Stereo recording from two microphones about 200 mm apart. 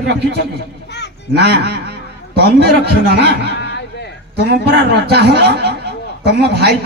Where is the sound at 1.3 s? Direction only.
55° right (ahead or behind).